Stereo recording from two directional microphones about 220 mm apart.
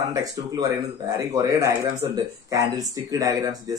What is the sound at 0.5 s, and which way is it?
Speech, 15° right (ahead or behind).